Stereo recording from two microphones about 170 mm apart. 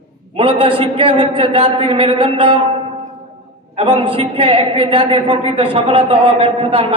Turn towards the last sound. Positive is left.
turn(degrees=-30)  # may be behind; listen again after turning